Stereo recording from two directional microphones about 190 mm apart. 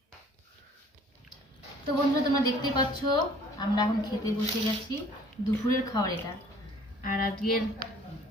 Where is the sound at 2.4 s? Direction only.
20° left (ahead or behind).